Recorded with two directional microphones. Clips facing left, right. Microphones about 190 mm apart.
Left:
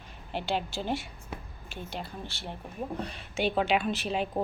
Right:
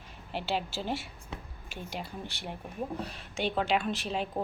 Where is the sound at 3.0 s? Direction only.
Centre (ahead or behind).